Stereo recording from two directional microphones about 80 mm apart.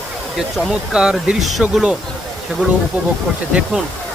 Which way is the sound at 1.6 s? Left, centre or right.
Centre.